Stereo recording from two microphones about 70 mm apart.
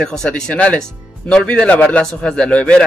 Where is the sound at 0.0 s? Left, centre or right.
Centre.